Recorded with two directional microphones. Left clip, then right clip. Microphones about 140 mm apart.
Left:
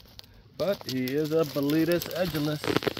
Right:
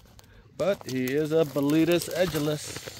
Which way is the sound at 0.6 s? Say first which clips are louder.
Right 2 dB; 25° right (ahead or behind).